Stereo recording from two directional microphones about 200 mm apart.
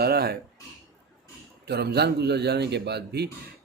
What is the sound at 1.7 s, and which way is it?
Speech, 55° right (ahead or behind).